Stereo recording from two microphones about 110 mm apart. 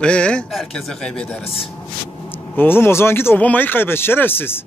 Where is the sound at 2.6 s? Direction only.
20° left (ahead or behind).